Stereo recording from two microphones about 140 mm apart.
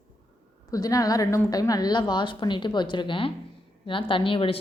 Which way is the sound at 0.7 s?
25° left (ahead or behind).